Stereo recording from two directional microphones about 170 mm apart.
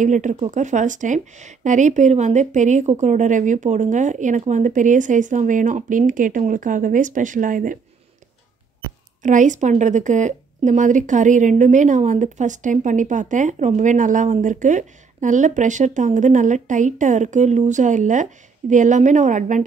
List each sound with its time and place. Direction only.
0.0 s speech: 45° right (ahead or behind)
9.2 s speech: 45° right (ahead or behind)